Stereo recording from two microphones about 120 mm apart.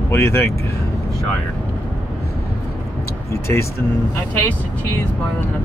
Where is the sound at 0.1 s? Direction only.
20° left (ahead or behind).